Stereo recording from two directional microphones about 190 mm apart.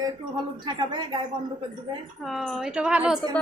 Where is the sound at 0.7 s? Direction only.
25° right (ahead or behind).